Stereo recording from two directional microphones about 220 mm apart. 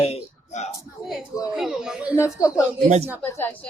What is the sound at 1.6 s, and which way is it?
Speech, centre (ahead or behind).